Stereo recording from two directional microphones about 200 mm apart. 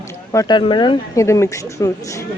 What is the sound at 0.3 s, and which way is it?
Speech, 20° left (ahead or behind).